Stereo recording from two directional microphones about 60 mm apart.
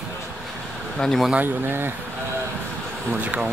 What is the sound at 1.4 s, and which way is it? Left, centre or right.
Speech, right.